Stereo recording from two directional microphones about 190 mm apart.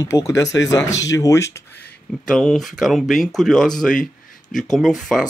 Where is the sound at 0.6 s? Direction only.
70° left (ahead or behind).